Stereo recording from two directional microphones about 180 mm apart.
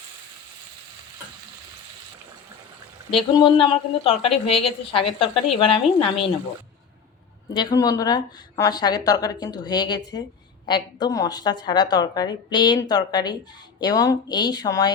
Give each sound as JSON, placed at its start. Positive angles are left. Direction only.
{"t": 3.2, "sound": "a woman's voice", "side_deg": 25}
{"t": 7.5, "sound": "a woman's voice", "side_deg": 20}